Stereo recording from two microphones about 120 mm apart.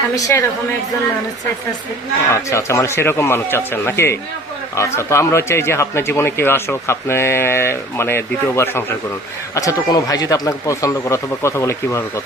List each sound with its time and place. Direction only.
0.2 s speech: 25° left (ahead or behind)
2.3 s speech: 25° left (ahead or behind)